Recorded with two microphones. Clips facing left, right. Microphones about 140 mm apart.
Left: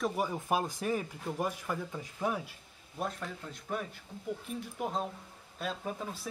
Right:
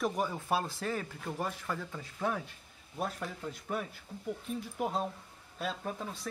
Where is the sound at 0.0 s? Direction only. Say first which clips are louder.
Even; 10° left (ahead or behind).